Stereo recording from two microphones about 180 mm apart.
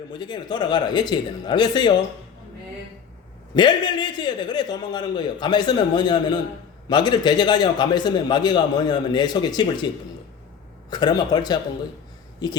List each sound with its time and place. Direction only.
0.1 s a man's voice: 25° left (ahead or behind)
3.5 s a man's voice: 25° left (ahead or behind)